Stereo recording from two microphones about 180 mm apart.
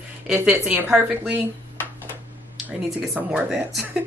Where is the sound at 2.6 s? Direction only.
5° right (ahead or behind).